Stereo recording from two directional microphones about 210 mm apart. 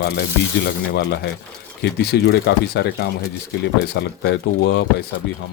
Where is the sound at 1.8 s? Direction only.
50° left (ahead or behind).